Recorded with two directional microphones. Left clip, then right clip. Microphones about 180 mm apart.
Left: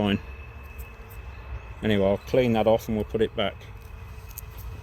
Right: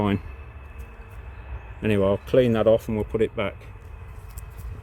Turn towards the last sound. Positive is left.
turn(degrees=-40)  # may be behind; listen again after turning